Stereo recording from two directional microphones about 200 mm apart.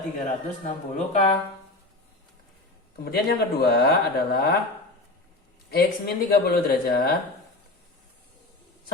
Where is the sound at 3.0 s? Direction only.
50° left (ahead or behind).